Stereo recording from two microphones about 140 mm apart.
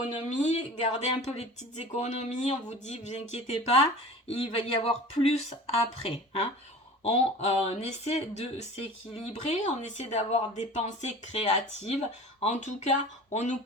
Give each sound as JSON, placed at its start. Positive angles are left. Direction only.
{"t": 0.0, "sound": "speech", "side_deg": 55}